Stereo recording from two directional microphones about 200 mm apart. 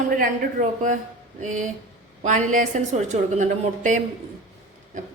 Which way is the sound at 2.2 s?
40° right (ahead or behind).